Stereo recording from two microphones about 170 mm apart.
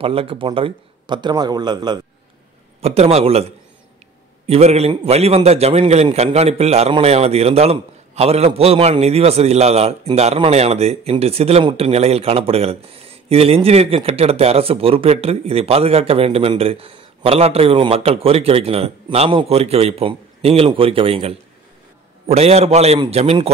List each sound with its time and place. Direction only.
0.0 s a man's voice: 35° right (ahead or behind)
2.8 s a man's voice: 35° right (ahead or behind)